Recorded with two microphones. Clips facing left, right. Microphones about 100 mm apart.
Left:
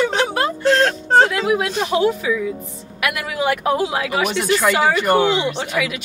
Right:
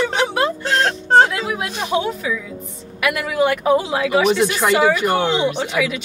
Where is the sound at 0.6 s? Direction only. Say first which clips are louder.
Left 7 dB; 15° right (ahead or behind).